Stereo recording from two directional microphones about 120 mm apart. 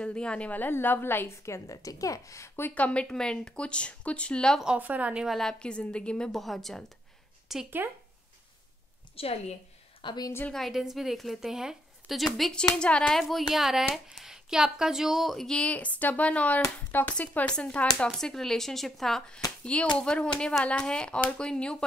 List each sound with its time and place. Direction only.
0.0 s a woman's voice: 10° left (ahead or behind)
4.6 s a woman's voice: 10° right (ahead or behind)
9.1 s a woman's voice: 55° left (ahead or behind)
10.0 s a woman's voice: 35° left (ahead or behind)
10.5 s a woman's voice: centre (ahead or behind)
13.2 s a woman's voice: centre (ahead or behind)